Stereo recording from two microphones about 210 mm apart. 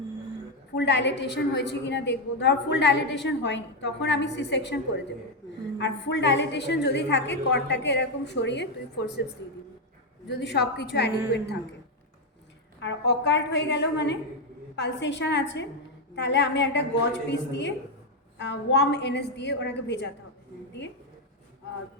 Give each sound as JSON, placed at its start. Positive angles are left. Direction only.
{"t": 0.8, "sound": "a woman's voice", "side_deg": 55}
{"t": 5.8, "sound": "a woman's voice", "side_deg": 60}
{"t": 10.2, "sound": "a woman's voice", "side_deg": 55}
{"t": 12.8, "sound": "a woman's voice", "side_deg": 55}